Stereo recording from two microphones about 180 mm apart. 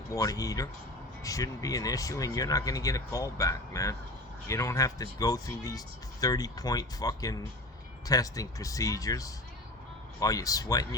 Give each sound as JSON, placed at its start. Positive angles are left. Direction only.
{"t": 0.1, "sound": "speech", "side_deg": 20}